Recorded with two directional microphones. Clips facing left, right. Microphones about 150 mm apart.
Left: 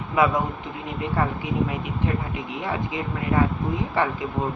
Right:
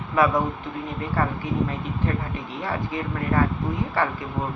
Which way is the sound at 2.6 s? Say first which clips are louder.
Even; 15° left (ahead or behind).